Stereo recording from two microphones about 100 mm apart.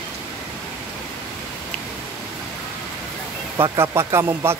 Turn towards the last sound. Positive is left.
turn(degrees=-25)  # may be behind; listen again after turning